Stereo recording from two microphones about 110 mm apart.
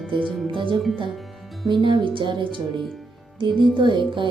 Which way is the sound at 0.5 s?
50° right (ahead or behind).